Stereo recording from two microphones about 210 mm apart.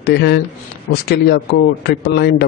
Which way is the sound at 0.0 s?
55° left (ahead or behind).